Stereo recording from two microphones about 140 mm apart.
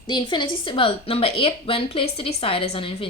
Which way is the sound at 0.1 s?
35° left (ahead or behind).